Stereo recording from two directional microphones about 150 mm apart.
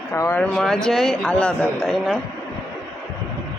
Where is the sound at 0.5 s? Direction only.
Centre (ahead or behind).